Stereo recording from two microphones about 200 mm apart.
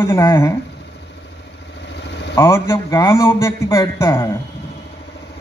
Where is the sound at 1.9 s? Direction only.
60° left (ahead or behind).